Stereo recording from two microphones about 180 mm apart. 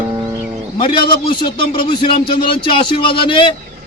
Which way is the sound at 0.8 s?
25° left (ahead or behind).